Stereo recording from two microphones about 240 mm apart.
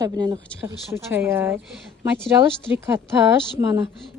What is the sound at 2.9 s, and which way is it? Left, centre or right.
Speech, centre.